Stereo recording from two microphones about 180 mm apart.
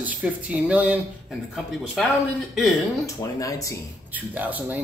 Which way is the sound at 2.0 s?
Centre (ahead or behind).